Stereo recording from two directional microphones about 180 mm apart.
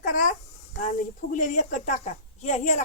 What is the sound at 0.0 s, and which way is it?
Babbling, 45° left (ahead or behind).